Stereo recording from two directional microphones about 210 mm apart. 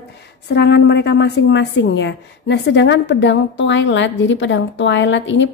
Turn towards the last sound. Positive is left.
turn(degrees=60)  # may be behind; listen again after turning